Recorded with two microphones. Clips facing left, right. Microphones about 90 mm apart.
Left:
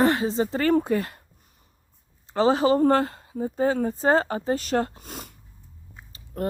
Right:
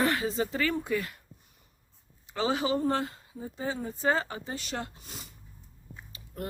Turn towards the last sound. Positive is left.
turn(degrees=40)  # may be behind; listen again after turning